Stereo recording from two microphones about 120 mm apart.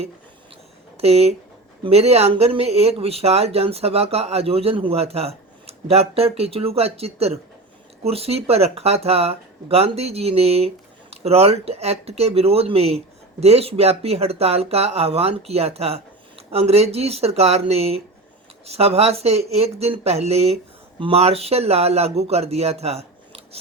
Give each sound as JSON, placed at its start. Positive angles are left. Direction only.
{"t": 1.0, "sound": "speech", "side_deg": -60}